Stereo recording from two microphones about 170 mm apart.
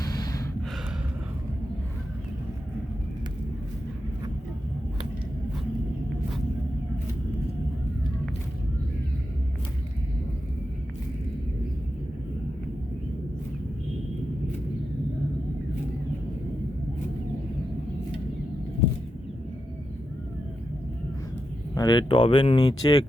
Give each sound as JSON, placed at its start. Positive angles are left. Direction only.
{"t": 0.0, "sound": "gasp", "side_deg": 20}
{"t": 21.8, "sound": "speech", "side_deg": 25}